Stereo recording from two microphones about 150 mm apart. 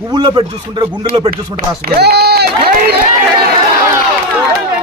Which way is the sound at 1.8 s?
90° right.